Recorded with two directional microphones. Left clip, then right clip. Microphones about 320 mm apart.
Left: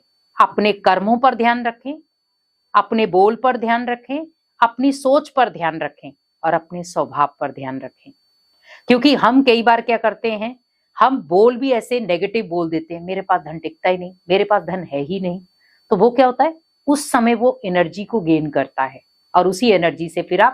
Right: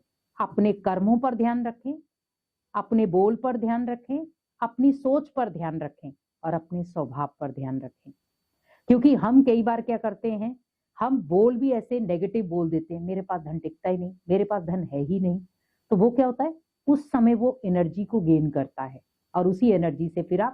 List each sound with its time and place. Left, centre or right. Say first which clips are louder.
0.3 s a woman's voice: left 11 dB; centre
12.5 s speech: left 7 dB; centre
12.7 s speech: left 6 dB; centre